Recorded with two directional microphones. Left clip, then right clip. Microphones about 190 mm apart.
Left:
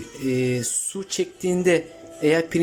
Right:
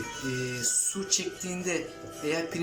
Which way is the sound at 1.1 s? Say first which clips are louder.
Left 10 dB; 45° left (ahead or behind).